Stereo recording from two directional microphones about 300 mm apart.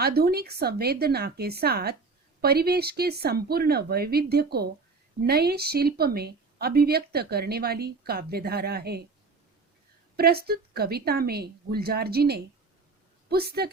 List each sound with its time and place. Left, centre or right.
0.0 s speech: right
10.2 s a woman's voice: right